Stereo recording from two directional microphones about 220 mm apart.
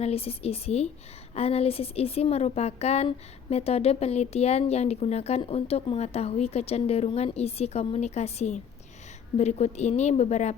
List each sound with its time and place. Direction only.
0.0 s a woman's voice: 25° left (ahead or behind)